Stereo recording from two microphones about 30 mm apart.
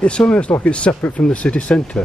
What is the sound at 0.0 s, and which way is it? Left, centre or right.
Speech, left.